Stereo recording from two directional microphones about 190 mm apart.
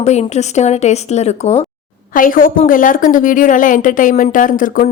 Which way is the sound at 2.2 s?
45° left (ahead or behind).